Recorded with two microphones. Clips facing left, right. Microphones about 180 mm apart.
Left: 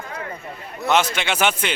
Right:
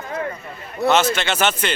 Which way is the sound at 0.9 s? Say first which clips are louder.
Right 1 dB; 10° left (ahead or behind).